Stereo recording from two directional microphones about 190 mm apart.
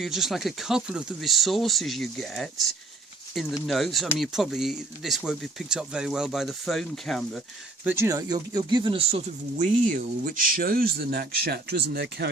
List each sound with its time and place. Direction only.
0.0 s speech: centre (ahead or behind)
7.9 s speech: 15° right (ahead or behind); by 9.6 s 30° right (ahead or behind)
10.2 s speech: 50° right (ahead or behind)